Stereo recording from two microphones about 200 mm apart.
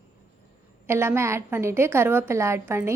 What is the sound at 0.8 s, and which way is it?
A woman's voice, 10° right (ahead or behind).